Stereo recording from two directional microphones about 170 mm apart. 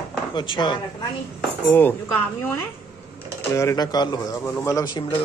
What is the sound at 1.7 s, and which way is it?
Speech, 10° left (ahead or behind).